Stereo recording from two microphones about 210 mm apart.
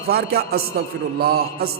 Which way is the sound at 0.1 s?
50° right (ahead or behind).